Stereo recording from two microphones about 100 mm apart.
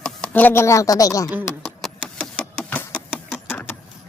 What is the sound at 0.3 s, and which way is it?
Speech, 20° left (ahead or behind).